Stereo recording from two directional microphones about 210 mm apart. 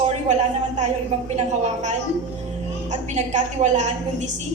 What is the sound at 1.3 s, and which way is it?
A woman's voice, 35° right (ahead or behind).